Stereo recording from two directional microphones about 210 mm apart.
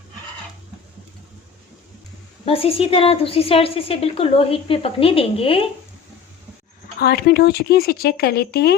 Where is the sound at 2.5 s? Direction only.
25° left (ahead or behind).